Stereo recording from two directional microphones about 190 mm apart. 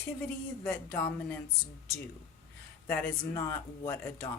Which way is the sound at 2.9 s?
15° left (ahead or behind).